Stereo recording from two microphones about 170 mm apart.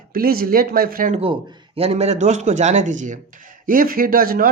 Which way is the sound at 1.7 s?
35° right (ahead or behind).